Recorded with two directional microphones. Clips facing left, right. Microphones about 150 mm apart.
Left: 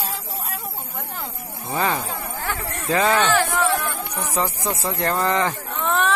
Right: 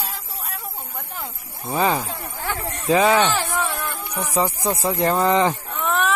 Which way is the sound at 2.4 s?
15° right (ahead or behind).